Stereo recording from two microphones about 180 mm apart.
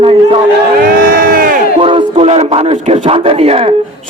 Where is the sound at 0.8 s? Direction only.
50° right (ahead or behind).